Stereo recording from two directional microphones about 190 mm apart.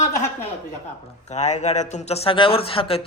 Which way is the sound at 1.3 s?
35° left (ahead or behind).